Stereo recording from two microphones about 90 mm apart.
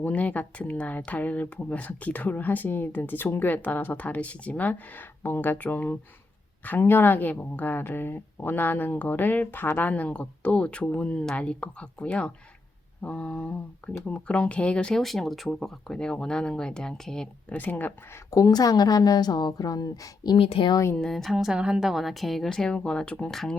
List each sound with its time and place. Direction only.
0.0 s speech: 15° left (ahead or behind)
17.6 s speech: 20° left (ahead or behind)
18.3 s a woman's voice: 45° left (ahead or behind)
20.3 s speech: 80° left
20.9 s speech: 5° left (ahead or behind)
21.3 s speech: 10° right (ahead or behind); by 23.6 s 5° left (ahead or behind)